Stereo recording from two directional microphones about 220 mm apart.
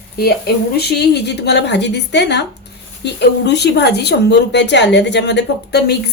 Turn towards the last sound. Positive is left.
turn(degrees=50)  # may be behind; listen again after turning